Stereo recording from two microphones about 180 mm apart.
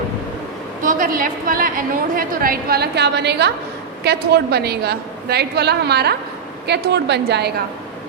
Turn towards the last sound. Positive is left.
turn(degrees=-70)  # may be behind; listen again after turning